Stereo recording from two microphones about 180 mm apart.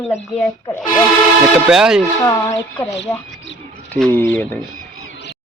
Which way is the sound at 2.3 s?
20° left (ahead or behind).